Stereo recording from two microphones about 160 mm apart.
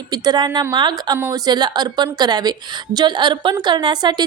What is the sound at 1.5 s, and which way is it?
A woman's voice, 25° right (ahead or behind).